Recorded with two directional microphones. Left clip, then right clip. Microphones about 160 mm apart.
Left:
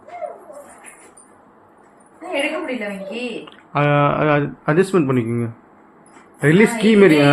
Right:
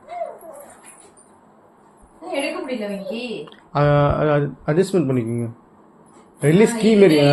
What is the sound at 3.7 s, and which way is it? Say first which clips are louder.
Speech: left 1 dB; centre (ahead or behind).